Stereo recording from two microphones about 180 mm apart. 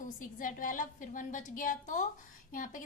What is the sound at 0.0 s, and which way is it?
A woman's voice, 50° left (ahead or behind).